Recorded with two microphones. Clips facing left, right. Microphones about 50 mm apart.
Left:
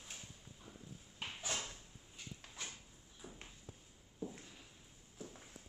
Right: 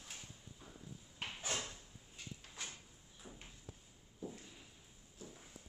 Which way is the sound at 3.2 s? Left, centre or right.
Centre.